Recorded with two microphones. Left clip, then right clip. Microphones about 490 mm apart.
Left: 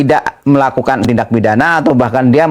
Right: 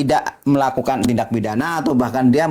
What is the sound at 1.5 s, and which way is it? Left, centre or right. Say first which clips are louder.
Speech: left 9 dB; left.